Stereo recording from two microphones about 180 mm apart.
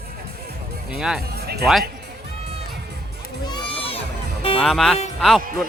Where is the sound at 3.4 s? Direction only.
25° left (ahead or behind).